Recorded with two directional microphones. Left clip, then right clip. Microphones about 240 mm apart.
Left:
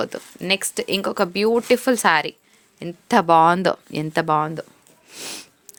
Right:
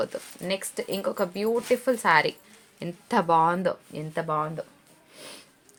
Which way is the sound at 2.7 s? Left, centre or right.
Left.